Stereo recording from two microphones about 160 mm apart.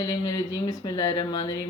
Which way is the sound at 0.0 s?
25° left (ahead or behind).